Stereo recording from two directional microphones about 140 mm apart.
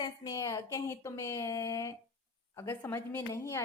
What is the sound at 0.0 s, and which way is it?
A woman's voice, 25° left (ahead or behind).